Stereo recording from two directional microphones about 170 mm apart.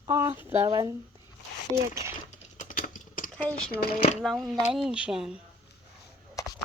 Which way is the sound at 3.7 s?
65° left (ahead or behind).